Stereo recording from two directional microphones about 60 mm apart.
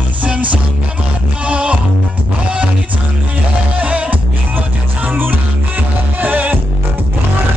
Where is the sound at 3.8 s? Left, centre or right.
Right.